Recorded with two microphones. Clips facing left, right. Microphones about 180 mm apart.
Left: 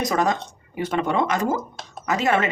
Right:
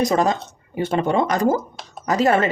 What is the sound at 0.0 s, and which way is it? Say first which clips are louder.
Speech: right 3 dB; 30° right (ahead or behind).